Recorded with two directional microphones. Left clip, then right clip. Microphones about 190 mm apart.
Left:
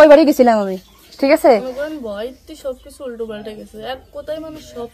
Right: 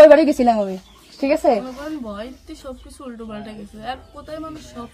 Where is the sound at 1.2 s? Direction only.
65° left (ahead or behind).